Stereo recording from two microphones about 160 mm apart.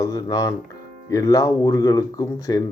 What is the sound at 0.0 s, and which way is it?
Speech, 20° left (ahead or behind).